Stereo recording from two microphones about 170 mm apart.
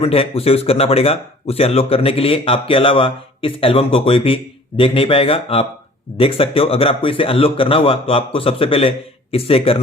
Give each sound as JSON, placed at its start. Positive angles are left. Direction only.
{"t": 0.0, "sound": "speech", "side_deg": 35}